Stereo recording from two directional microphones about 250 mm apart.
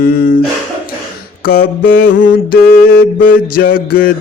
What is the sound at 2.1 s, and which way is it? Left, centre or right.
Mantra, left.